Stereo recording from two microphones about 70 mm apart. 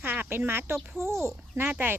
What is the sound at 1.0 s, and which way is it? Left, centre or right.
Speech, left.